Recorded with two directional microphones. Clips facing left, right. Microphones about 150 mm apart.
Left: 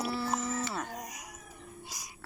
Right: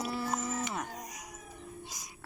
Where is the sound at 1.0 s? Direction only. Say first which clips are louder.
Left 1 dB; centre (ahead or behind).